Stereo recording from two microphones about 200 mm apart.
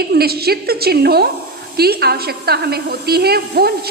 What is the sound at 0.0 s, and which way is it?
A woman's voice, 50° right (ahead or behind).